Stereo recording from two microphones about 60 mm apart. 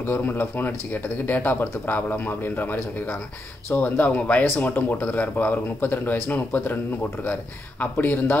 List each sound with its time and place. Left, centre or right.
0.0 s speech: left